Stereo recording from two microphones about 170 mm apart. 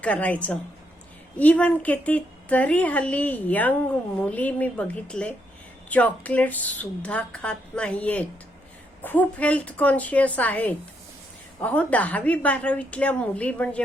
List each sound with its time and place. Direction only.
0.0 s a woman's voice: 10° left (ahead or behind)